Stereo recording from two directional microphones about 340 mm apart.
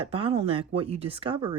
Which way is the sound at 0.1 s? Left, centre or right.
Centre.